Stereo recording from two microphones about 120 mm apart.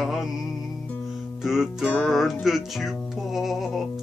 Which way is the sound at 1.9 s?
5° left (ahead or behind).